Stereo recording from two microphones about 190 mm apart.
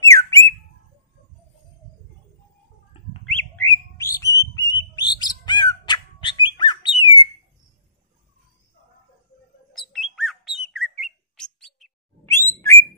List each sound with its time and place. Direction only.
0.0 s a sound: 15° left (ahead or behind)
3.3 s bird: 10° left (ahead or behind)
9.7 s bird: centre (ahead or behind)
12.3 s bird: 15° left (ahead or behind)